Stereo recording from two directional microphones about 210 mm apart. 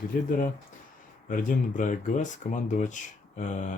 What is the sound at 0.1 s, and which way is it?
Speech, 45° left (ahead or behind).